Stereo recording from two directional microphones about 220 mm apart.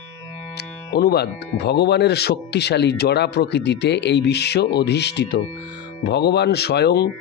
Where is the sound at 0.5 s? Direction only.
45° left (ahead or behind).